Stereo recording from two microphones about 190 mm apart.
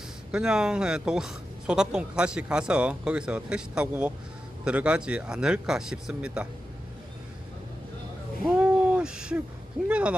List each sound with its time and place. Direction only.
0.3 s speech: 5° right (ahead or behind)
8.4 s a sound: 5° right (ahead or behind)
9.9 s speech: 5° right (ahead or behind)